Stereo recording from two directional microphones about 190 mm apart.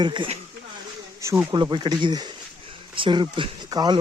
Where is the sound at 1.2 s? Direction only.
15° right (ahead or behind).